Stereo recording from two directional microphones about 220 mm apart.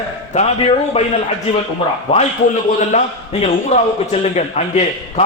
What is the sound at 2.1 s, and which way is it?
A man's voice, 30° left (ahead or behind).